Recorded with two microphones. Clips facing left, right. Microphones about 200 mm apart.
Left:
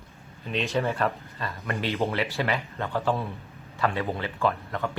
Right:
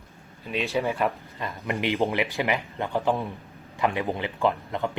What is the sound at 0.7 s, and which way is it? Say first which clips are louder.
Speech: right 1 dB; 15° right (ahead or behind).